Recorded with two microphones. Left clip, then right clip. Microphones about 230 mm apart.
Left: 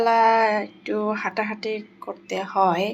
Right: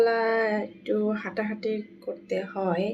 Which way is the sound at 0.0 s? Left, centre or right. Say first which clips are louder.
Left 6 dB; centre.